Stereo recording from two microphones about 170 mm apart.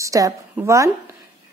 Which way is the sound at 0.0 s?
20° right (ahead or behind).